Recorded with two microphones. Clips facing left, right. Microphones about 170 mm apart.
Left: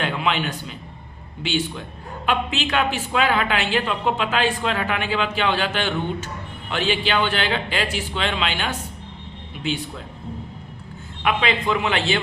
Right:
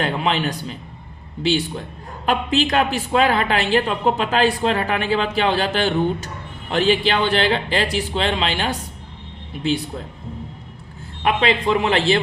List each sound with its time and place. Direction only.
0.0 s a man's voice: 40° right (ahead or behind)
11.2 s a woman's voice: 35° right (ahead or behind)